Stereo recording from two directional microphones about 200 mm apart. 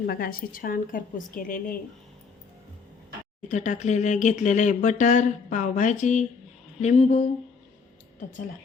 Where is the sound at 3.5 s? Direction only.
35° left (ahead or behind).